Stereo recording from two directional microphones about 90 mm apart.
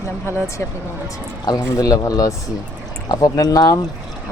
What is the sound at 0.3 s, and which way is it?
Speech, 30° left (ahead or behind).